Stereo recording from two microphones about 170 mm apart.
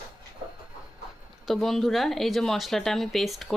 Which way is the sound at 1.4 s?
Centre (ahead or behind).